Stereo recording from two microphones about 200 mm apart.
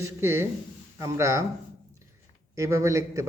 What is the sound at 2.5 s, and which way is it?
Speech, 15° right (ahead or behind).